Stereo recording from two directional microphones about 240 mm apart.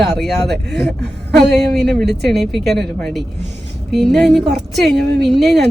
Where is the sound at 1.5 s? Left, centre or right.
Centre.